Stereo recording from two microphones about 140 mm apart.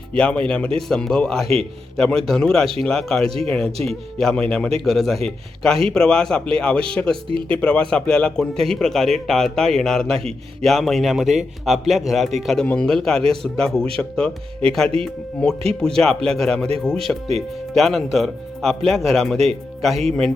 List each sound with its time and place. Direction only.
0.1 s a man's voice: 10° left (ahead or behind)
7.3 s speech: 40° right (ahead or behind)
7.5 s a man's voice: 10° left (ahead or behind)